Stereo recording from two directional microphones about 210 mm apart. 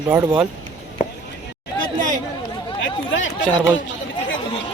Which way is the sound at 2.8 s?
65° left (ahead or behind).